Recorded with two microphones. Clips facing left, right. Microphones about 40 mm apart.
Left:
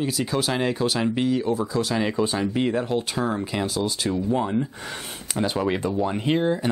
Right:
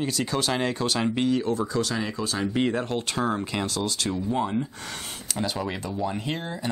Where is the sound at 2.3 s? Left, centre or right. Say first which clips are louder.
Left 2 dB; centre.